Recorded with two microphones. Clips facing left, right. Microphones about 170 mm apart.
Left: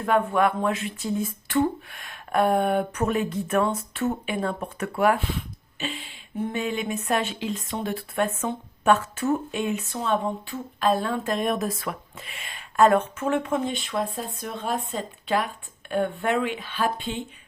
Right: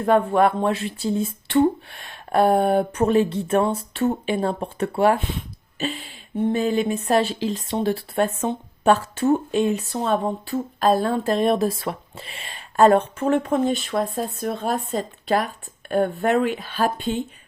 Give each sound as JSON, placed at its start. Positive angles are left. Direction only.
{"t": 0.0, "sound": "speech", "side_deg": -30}
{"t": 5.8, "sound": "speech", "side_deg": -40}